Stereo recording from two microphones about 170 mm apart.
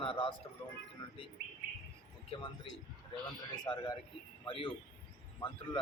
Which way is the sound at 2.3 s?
30° left (ahead or behind).